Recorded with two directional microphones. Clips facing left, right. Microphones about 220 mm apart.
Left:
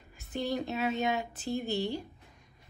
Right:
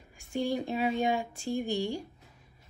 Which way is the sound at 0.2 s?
10° right (ahead or behind).